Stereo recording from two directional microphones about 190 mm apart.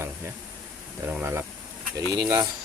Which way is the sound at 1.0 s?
10° right (ahead or behind).